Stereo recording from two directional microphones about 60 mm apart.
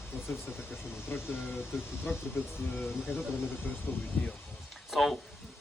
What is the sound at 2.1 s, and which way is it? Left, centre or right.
Speech, left.